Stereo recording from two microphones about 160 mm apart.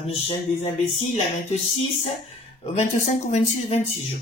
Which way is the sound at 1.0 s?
45° left (ahead or behind).